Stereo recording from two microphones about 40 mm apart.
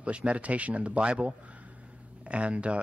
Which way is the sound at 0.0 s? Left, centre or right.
Right.